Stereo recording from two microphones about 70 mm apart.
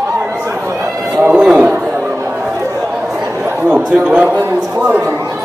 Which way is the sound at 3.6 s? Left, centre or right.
Right.